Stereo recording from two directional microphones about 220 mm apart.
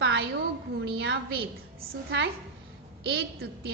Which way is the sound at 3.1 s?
50° right (ahead or behind).